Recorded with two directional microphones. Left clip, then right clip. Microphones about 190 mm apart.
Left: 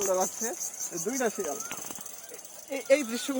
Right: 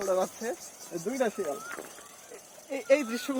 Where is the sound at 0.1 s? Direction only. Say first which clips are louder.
Even; 35° right (ahead or behind).